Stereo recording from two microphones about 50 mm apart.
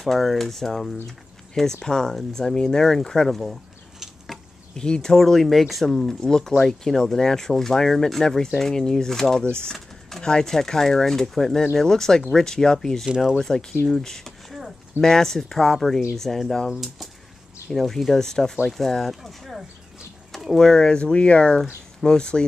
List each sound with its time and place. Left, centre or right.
0.0 s speech: centre
4.7 s speech: centre
5.2 s speech: centre
13.8 s a sound: centre
15.0 s speech: centre